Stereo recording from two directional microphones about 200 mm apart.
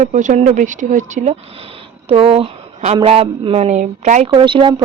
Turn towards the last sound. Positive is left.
turn(degrees=-25)  # may be behind; listen again after turning